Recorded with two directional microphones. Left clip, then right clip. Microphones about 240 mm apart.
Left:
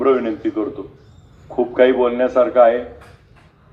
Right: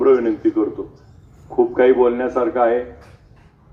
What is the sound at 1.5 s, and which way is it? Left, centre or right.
A man's voice, left.